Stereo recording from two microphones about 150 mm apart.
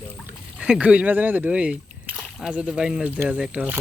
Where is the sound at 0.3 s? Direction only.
10° right (ahead or behind).